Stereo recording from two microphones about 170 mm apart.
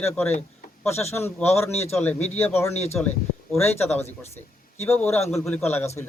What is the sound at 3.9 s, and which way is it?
Speech, 40° left (ahead or behind).